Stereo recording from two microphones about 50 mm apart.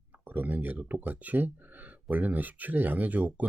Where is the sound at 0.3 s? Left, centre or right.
Right.